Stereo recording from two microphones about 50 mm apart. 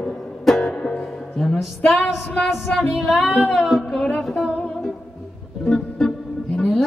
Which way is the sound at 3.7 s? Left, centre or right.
Centre.